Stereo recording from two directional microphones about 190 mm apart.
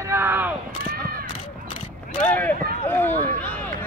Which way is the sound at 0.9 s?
50° right (ahead or behind).